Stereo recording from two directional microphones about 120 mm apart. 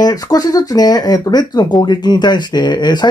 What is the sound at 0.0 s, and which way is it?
Speech, 30° left (ahead or behind).